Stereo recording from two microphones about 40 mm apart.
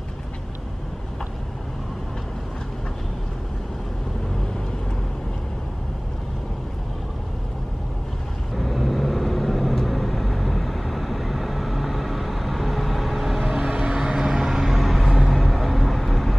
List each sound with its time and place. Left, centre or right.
8.5 s vehicle: centre
13.7 s vehicle: centre
14.5 s vehicle: centre